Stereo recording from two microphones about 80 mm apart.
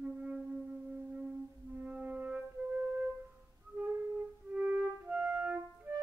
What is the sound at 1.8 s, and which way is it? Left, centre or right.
Music, centre.